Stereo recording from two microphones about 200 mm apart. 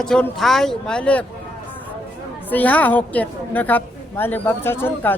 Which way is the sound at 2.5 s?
10° left (ahead or behind).